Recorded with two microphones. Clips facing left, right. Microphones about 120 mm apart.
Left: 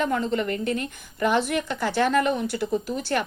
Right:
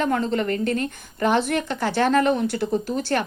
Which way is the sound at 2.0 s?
45° right (ahead or behind).